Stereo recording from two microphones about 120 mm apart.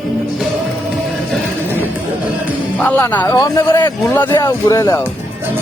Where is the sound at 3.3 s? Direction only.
30° left (ahead or behind).